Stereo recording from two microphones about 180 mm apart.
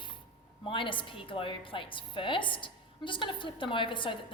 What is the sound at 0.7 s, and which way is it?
A woman's voice, 30° left (ahead or behind).